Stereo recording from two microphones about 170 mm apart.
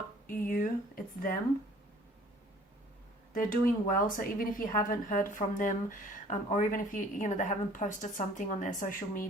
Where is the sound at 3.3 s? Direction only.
55° left (ahead or behind).